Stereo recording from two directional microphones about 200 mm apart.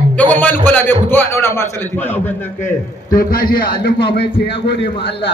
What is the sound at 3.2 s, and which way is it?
A man's voice, 50° left (ahead or behind).